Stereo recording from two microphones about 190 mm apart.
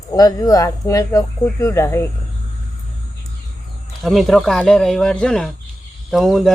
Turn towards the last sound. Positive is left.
turn(degrees=0)  # may be behind; listen again after turning